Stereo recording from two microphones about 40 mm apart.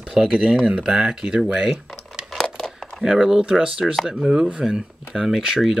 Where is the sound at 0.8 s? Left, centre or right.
Centre.